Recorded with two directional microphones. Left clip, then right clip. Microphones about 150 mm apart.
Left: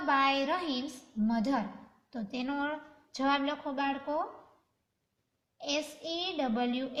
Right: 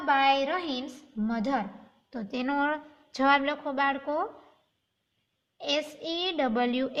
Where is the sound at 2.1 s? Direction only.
60° right (ahead or behind).